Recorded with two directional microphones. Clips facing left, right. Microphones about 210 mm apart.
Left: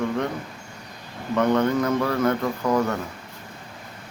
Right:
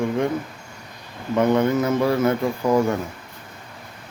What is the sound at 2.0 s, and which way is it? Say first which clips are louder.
Speech: right 4 dB; 20° right (ahead or behind).